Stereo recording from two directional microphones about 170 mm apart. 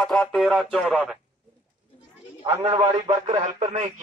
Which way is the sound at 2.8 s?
25° right (ahead or behind).